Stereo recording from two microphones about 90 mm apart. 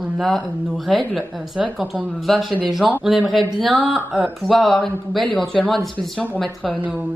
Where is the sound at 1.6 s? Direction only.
15° right (ahead or behind).